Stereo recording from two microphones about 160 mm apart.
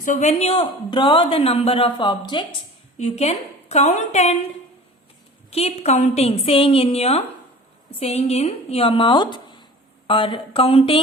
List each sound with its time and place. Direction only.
0.0 s speech: 50° left (ahead or behind); by 2.6 s 30° left (ahead or behind)
3.0 s a woman's voice: 40° left (ahead or behind)
5.5 s speech: 40° left (ahead or behind)